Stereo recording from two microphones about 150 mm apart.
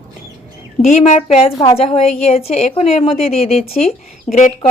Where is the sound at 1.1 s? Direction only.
45° left (ahead or behind).